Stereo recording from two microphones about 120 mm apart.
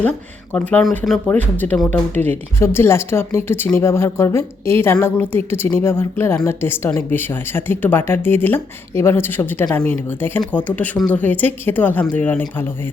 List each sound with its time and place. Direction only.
0.5 s speech: 10° left (ahead or behind)
1.3 s a woman's voice: 15° left (ahead or behind)